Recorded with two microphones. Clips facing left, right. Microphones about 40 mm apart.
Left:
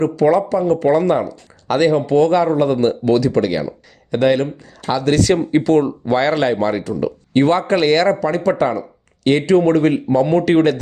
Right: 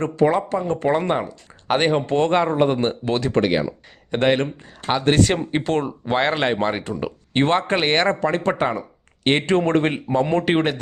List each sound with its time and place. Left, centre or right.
0.0 s speech: right